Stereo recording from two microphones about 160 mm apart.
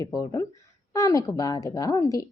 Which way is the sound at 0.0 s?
25° left (ahead or behind).